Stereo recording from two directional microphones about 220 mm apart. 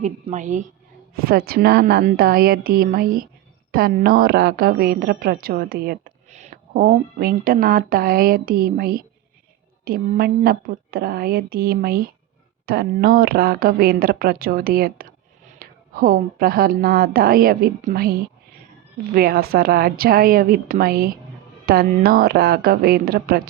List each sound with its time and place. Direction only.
0.0 s a woman's voice: 35° right (ahead or behind)